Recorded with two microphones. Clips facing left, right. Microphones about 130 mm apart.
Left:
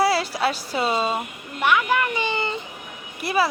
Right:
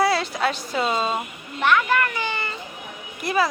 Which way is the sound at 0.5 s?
5° left (ahead or behind).